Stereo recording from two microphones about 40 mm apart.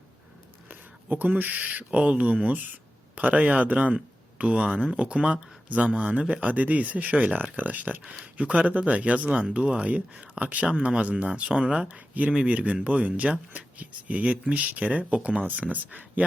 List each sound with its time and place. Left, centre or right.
0.7 s speech: right
8.0 s speech: right
8.4 s speech: right
14.3 s speech: right
14.8 s speech: right